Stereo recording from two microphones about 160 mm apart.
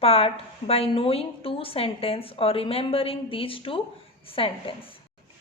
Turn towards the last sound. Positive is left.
turn(degrees=35)  # may be behind; listen again after turning